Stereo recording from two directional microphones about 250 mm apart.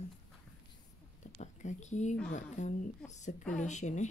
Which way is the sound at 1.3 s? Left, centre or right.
Left.